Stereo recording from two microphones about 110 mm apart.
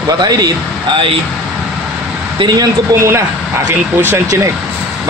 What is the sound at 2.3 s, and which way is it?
Speech, 45° right (ahead or behind).